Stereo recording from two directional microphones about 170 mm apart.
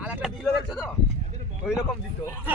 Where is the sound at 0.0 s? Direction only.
5° right (ahead or behind).